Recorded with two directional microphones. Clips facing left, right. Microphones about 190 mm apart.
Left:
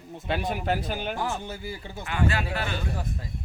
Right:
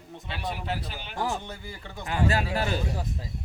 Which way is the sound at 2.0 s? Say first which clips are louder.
Right 1 dB; 40° right (ahead or behind).